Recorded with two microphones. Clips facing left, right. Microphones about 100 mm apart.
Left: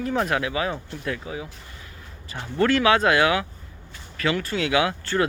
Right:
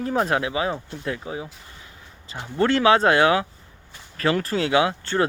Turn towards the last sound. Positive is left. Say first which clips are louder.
# right 2 dB
turn(degrees=-25)  # may be behind; listen again after turning